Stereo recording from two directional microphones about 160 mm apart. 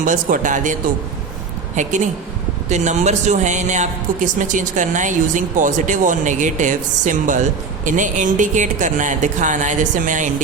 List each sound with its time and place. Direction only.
0.0 s speech: 55° right (ahead or behind)